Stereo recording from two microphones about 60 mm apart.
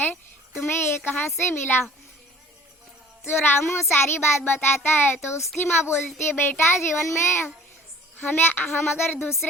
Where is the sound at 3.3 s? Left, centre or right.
Left.